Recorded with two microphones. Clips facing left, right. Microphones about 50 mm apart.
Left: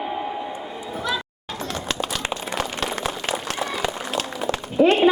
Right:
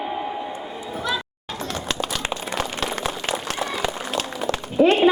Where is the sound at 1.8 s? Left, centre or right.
Centre.